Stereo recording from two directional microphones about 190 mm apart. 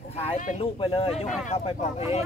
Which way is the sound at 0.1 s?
30° left (ahead or behind).